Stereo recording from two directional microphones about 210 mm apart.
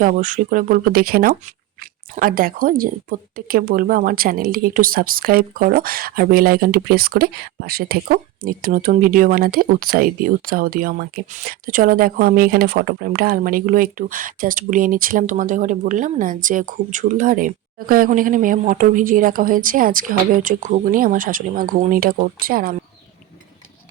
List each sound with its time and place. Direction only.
0.0 s speech: 40° right (ahead or behind)